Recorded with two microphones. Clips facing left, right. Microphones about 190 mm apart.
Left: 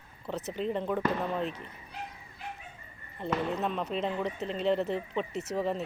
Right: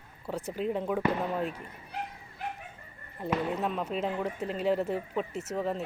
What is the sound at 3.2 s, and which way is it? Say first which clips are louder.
Speech: right 1 dB; 10° right (ahead or behind).